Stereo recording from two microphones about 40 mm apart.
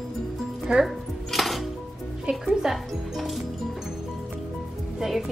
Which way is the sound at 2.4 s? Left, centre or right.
Centre.